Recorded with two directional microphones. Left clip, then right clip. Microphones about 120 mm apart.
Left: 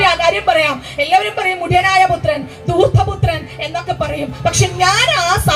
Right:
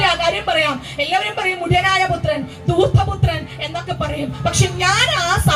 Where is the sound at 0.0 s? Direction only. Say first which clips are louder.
Left 4 dB; 40° left (ahead or behind).